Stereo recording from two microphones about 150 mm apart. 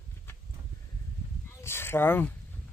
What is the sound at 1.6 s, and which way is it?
Speech, 15° left (ahead or behind).